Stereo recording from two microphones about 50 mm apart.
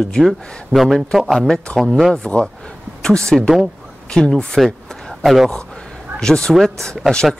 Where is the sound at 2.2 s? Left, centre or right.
Left.